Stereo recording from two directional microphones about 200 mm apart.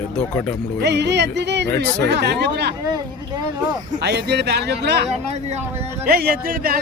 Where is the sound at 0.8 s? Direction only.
60° right (ahead or behind).